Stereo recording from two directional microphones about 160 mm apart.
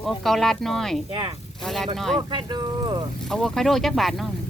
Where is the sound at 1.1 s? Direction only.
35° right (ahead or behind).